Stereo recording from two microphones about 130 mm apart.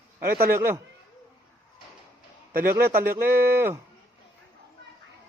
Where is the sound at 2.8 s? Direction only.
15° right (ahead or behind).